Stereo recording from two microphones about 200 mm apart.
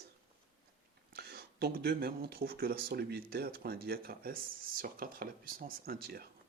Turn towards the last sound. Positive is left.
turn(degrees=-50)  # may be behind; listen again after turning